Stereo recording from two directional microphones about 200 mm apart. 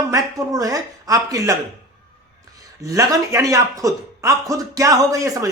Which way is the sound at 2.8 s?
15° right (ahead or behind).